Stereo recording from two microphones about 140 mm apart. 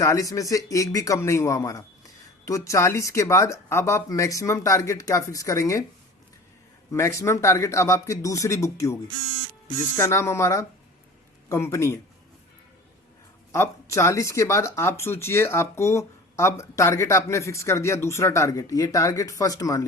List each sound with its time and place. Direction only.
0.0 s speech: 20° left (ahead or behind)
6.9 s speech: 20° left (ahead or behind)
10.0 s speech: 20° left (ahead or behind)
13.5 s speech: 20° left (ahead or behind)